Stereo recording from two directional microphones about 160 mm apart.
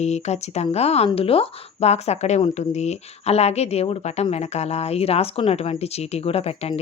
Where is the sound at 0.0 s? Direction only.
45° left (ahead or behind).